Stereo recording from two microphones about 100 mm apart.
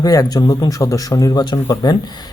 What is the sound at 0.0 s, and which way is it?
Speech, 40° left (ahead or behind).